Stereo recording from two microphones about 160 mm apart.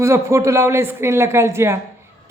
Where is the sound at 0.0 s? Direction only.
20° right (ahead or behind).